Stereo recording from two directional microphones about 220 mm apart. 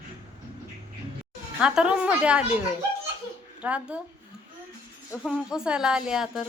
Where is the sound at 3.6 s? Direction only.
5° right (ahead or behind).